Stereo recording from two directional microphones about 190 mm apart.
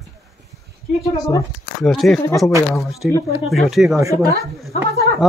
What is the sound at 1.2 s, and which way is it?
Speech, 20° left (ahead or behind).